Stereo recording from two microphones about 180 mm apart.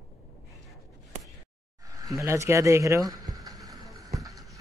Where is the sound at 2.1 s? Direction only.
15° right (ahead or behind).